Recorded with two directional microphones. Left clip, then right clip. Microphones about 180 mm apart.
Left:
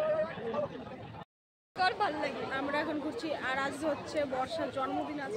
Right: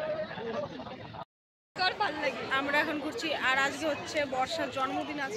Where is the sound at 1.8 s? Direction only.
80° left.